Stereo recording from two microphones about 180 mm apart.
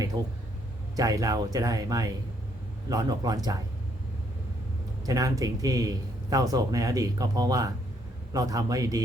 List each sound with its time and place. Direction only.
0.2 s speech: 20° right (ahead or behind)
5.0 s speech: 20° right (ahead or behind)